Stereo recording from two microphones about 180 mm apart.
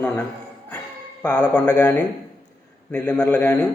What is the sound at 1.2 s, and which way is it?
Speech, 5° left (ahead or behind).